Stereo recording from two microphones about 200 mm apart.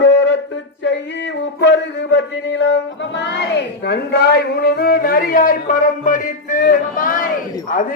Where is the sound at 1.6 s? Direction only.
60° left (ahead or behind).